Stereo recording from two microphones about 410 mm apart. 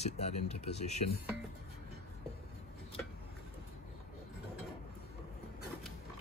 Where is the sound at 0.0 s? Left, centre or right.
Centre.